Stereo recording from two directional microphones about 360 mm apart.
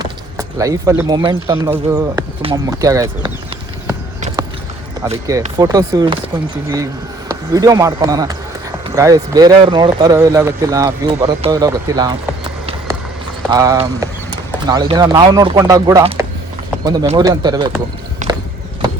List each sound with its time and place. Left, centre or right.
0.0 s speech: centre
5.0 s speech: centre
7.3 s speech: centre
13.5 s speech: centre
18.2 s horse: centre